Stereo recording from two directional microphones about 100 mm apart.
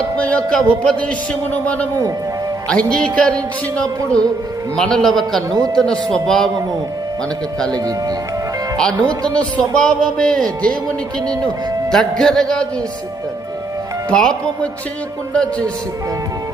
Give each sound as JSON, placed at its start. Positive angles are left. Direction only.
{"t": 0.2, "sound": "music", "side_deg": 10}
{"t": 4.8, "sound": "a man's voice", "side_deg": 5}
{"t": 5.5, "sound": "a man's voice", "side_deg": -35}
{"t": 5.7, "sound": "music", "side_deg": 5}
{"t": 9.0, "sound": "music", "side_deg": 10}
{"t": 14.1, "sound": "music", "side_deg": 10}